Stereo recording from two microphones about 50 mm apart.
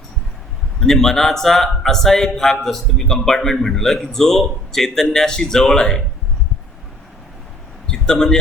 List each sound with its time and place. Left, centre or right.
0.8 s speech: centre
7.9 s a man's voice: centre